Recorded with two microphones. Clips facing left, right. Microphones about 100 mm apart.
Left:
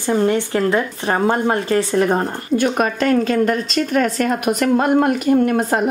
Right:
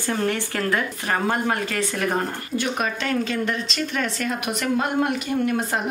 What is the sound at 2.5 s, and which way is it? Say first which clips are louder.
A woman's voice: left 9 dB; 50° left (ahead or behind).